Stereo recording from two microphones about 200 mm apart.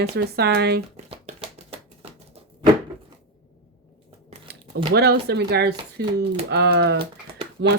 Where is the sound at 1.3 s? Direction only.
35° right (ahead or behind).